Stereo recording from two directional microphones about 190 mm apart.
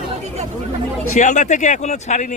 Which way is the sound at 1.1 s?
40° left (ahead or behind).